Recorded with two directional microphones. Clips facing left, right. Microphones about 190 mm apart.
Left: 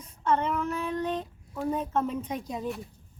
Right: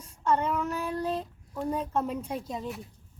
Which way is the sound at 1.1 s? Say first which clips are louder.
Even; 5° left (ahead or behind).